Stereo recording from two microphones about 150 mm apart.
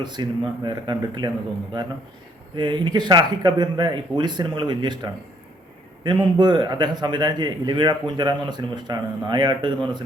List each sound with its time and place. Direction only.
0.0 s a man's voice: 30° right (ahead or behind)
2.6 s a man's voice: 30° right (ahead or behind)